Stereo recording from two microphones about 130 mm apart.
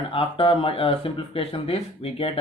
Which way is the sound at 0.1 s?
45° left (ahead or behind).